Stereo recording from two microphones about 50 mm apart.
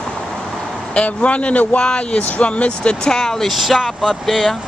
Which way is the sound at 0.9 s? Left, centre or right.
Left.